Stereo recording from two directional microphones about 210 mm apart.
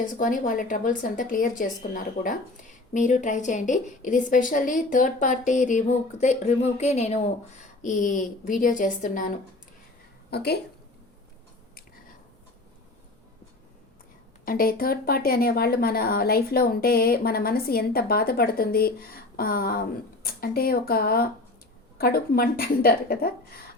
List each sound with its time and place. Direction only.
0.0 s a woman's voice: 40° left (ahead or behind)
10.2 s a woman's voice: 50° left (ahead or behind)
14.4 s speech: 45° left (ahead or behind)